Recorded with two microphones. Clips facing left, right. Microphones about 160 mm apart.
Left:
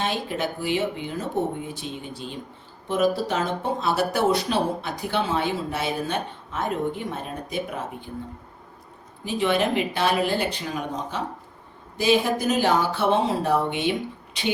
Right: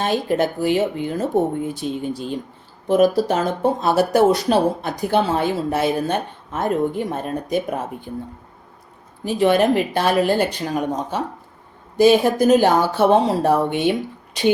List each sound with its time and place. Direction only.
0.0 s speech: 45° right (ahead or behind)
9.2 s speech: 45° right (ahead or behind)